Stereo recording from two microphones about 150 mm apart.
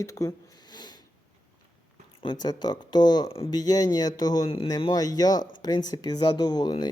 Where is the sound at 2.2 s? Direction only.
30° left (ahead or behind).